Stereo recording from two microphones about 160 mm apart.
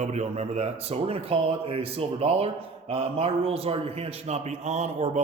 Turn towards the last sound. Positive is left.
turn(degrees=-45)  # may be behind; listen again after turning